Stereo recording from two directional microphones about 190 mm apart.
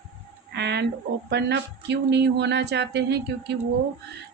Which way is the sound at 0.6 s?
65° right (ahead or behind).